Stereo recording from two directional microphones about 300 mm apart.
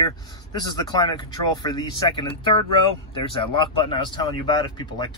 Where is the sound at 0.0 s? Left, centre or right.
Centre.